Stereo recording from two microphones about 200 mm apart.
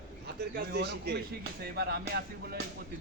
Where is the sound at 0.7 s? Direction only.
55° right (ahead or behind).